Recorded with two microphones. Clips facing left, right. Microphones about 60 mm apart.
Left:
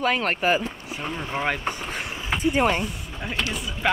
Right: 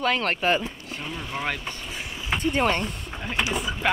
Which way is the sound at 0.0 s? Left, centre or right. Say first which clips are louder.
Left 1 dB; centre.